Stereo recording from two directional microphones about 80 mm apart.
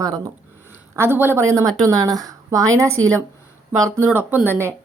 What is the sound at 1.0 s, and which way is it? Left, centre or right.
A woman's voice, right.